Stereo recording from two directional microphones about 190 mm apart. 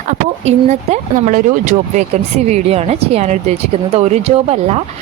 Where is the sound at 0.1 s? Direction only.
35° right (ahead or behind).